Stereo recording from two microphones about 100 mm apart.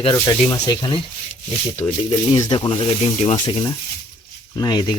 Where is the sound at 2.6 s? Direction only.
60° left (ahead or behind).